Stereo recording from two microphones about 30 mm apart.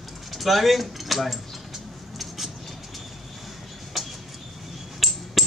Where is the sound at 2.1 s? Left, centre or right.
Centre.